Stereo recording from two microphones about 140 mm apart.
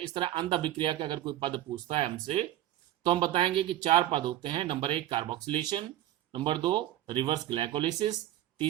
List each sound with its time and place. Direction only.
0.1 s speech: 35° right (ahead or behind)